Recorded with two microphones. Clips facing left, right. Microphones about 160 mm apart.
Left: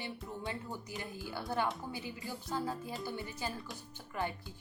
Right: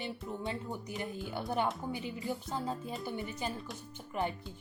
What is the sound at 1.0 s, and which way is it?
A woman's voice, 20° right (ahead or behind).